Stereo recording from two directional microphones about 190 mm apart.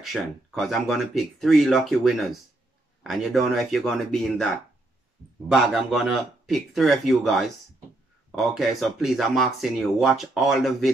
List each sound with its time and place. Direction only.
0.0 s speech: centre (ahead or behind)
5.5 s speech: 5° right (ahead or behind)